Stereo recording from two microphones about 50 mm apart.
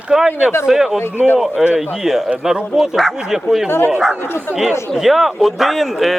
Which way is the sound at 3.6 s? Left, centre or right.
Left.